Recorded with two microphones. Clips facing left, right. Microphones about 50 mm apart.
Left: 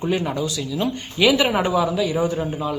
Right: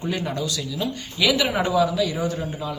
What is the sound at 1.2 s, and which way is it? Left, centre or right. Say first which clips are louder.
A woman's voice: left 4 dB; left.